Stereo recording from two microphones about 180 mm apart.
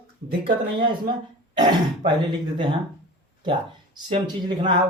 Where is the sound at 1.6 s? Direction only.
25° right (ahead or behind).